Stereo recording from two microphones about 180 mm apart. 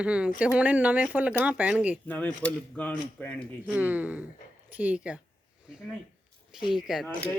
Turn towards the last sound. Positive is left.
turn(degrees=0)  # may be behind; listen again after turning